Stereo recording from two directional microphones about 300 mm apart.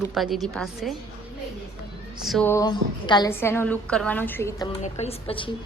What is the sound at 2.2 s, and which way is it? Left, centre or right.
A woman's voice, centre.